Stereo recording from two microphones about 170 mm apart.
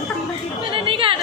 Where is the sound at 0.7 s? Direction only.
30° right (ahead or behind).